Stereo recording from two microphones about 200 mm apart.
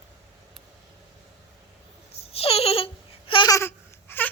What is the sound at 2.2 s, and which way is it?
Babbling, 30° left (ahead or behind).